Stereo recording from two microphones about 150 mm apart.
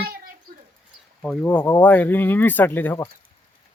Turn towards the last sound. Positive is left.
turn(degrees=15)  # may be behind; listen again after turning